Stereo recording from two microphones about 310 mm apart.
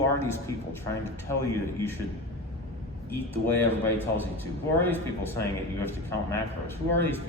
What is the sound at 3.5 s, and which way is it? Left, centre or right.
A man's voice, centre.